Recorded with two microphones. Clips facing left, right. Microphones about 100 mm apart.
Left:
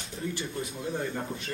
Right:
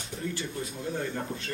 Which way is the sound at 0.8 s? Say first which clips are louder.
Even; 20° left (ahead or behind).